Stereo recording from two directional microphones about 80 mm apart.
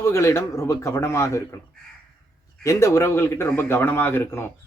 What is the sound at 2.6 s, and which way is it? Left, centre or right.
A man's voice, left.